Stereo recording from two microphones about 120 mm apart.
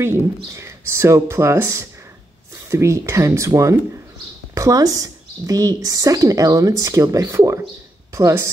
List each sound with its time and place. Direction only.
0.0 s speech: 25° right (ahead or behind)